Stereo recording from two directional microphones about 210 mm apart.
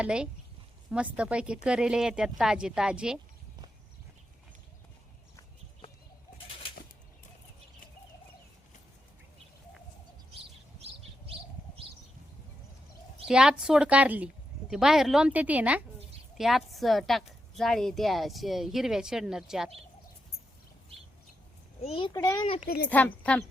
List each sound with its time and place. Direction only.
0.0 s a woman's voice: 5° right (ahead or behind)
13.2 s a woman's voice: 5° right (ahead or behind)
21.8 s a child's voice: 25° left (ahead or behind)
22.9 s speech: 10° left (ahead or behind)